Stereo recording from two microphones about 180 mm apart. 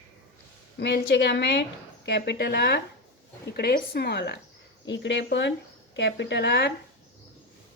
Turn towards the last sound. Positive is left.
turn(degrees=70)  # may be behind; listen again after turning